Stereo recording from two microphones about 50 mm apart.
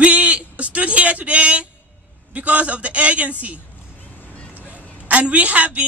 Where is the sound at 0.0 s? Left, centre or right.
Right.